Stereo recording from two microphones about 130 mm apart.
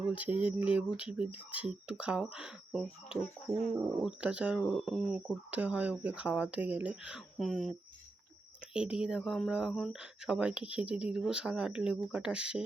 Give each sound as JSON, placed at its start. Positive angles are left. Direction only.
{"t": 0.1, "sound": "speech", "side_deg": -10}
{"t": 3.2, "sound": "speech", "side_deg": 60}
{"t": 3.8, "sound": "speech", "side_deg": -10}
{"t": 8.7, "sound": "speech", "side_deg": -5}